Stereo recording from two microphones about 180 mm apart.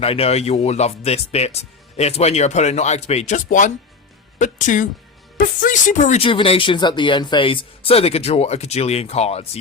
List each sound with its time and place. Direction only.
0.0 s speech: 35° left (ahead or behind)
6.1 s speech: 30° left (ahead or behind)